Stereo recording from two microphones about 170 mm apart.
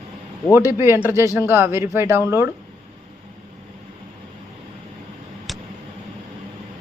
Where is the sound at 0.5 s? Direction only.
15° right (ahead or behind).